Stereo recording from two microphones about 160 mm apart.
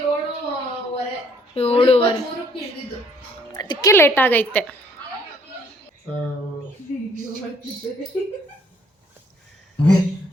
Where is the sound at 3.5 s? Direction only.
25° left (ahead or behind); by 4.5 s 10° left (ahead or behind).